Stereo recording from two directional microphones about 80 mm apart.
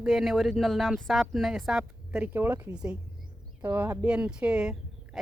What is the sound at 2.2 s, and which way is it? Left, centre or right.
A woman's voice, right.